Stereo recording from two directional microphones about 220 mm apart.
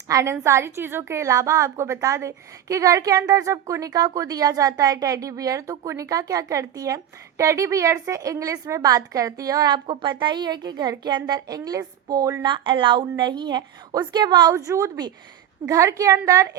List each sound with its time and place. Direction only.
0.1 s a woman's voice: 15° right (ahead or behind)